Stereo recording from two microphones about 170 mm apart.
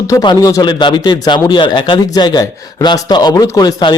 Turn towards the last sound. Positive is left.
turn(degrees=25)  # may be behind; listen again after turning